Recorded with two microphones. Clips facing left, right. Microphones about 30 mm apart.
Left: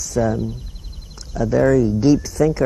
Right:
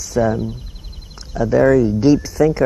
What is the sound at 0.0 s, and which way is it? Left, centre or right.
Speech, centre.